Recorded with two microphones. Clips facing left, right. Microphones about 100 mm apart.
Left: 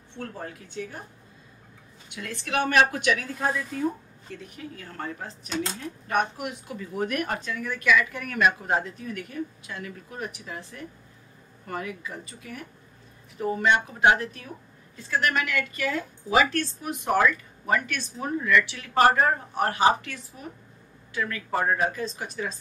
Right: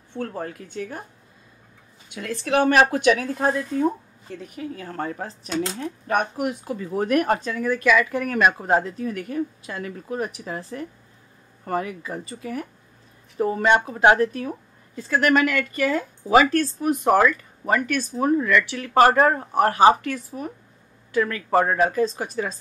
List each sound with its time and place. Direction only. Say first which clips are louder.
0.2 s speech: right 7 dB; 70° right (ahead or behind)
0.7 s a woman's voice: right 4 dB; 50° right (ahead or behind)
2.1 s a woman's voice: right 7 dB; 35° right (ahead or behind); by 22.0 s 60° right (ahead or behind)
22.0 s speech: right 7 dB; 40° right (ahead or behind)